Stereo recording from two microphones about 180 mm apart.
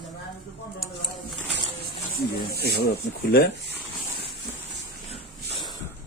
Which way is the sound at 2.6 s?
60° left (ahead or behind).